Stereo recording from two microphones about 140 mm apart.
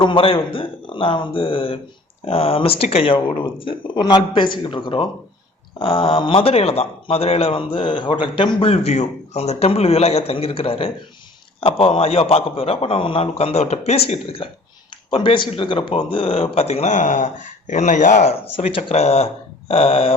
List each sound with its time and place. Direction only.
0.0 s a man's voice: 40° left (ahead or behind)
15.1 s a man's voice: 35° left (ahead or behind); by 18.3 s 55° left (ahead or behind)
18.5 s a man's voice: 45° left (ahead or behind)